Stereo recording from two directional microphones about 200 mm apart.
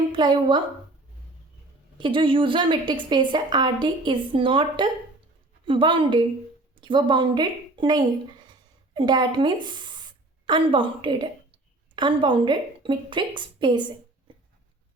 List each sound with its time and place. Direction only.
0.1 s a woman's voice: 25° right (ahead or behind)
2.0 s a woman's voice: 25° right (ahead or behind)